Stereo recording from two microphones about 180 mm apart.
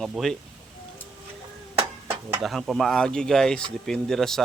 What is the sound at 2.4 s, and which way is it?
Speech, centre (ahead or behind).